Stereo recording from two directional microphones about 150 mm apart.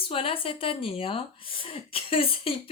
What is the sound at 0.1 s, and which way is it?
Speech, 40° left (ahead or behind).